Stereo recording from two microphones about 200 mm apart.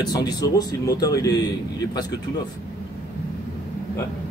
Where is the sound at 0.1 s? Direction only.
20° left (ahead or behind).